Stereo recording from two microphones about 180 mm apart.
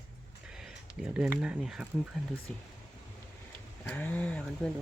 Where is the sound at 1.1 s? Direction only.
10° right (ahead or behind).